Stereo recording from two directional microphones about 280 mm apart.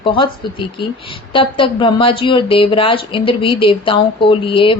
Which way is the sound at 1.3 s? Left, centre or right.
Centre.